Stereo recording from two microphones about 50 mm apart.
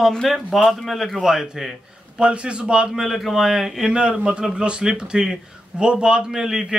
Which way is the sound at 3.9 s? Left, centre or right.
Centre.